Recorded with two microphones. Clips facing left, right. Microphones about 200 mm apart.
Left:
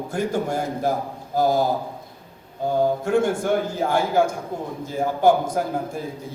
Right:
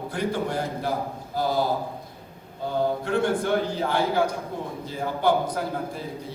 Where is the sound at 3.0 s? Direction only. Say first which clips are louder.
Left 3 dB; 45° left (ahead or behind).